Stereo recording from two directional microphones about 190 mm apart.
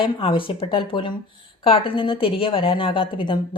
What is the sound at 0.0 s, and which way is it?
Speech, 25° left (ahead or behind).